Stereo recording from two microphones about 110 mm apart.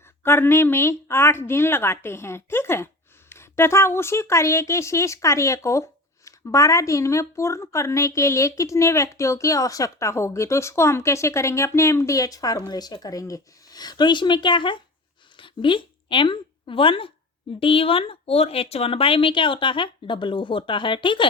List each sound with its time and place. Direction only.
0.2 s a woman's voice: 20° left (ahead or behind); by 21.2 s 50° left (ahead or behind)